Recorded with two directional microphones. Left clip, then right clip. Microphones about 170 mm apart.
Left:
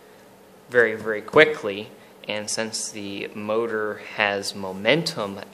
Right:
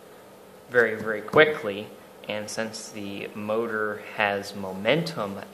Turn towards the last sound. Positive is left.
turn(degrees=55)  # may be behind; listen again after turning